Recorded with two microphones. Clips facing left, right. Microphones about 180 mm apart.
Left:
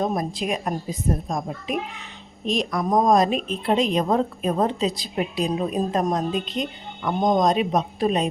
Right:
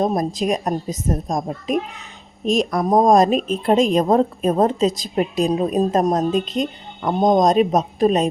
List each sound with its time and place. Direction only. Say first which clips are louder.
0.0 s a woman's voice: right 5 dB; 40° right (ahead or behind)